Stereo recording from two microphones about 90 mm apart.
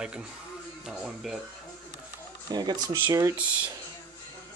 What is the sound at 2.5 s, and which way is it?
Speech, 50° right (ahead or behind).